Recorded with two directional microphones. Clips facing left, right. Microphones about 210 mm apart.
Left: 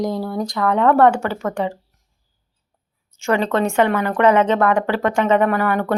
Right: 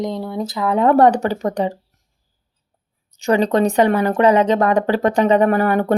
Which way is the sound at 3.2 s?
35° right (ahead or behind).